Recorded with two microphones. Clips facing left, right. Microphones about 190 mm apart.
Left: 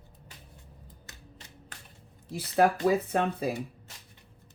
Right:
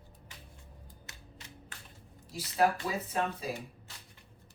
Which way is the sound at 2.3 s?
55° left (ahead or behind).